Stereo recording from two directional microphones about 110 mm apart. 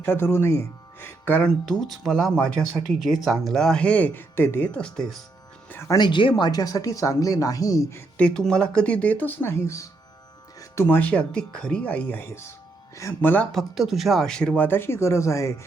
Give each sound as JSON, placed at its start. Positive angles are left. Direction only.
{"t": 0.0, "sound": "speech", "side_deg": 20}
{"t": 1.9, "sound": "speech", "side_deg": 0}
{"t": 5.9, "sound": "speech", "side_deg": 45}
{"t": 8.2, "sound": "speech", "side_deg": 5}
{"t": 13.5, "sound": "speech", "side_deg": 0}